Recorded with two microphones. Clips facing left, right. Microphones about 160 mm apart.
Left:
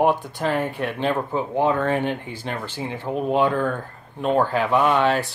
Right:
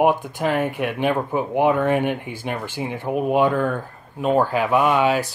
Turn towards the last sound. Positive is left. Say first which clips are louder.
# right 1 dB
turn(degrees=-10)  # may be behind; listen again after turning